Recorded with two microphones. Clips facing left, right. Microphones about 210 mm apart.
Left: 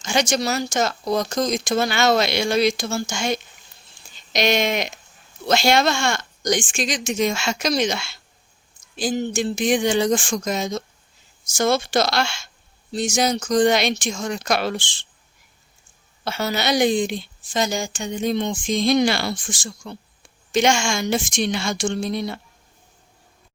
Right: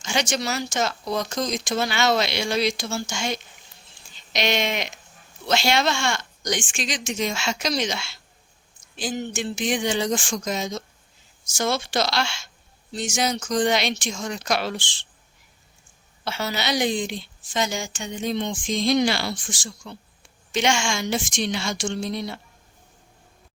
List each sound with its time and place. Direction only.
0.0 s a woman's voice: 45° left (ahead or behind)
9.0 s a woman's voice: 40° left (ahead or behind)
12.9 s a woman's voice: 40° left (ahead or behind); by 14.9 s 55° left (ahead or behind)
16.2 s a woman's voice: 45° left (ahead or behind)